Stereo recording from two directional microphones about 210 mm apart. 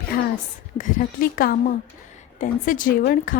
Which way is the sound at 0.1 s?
45° left (ahead or behind).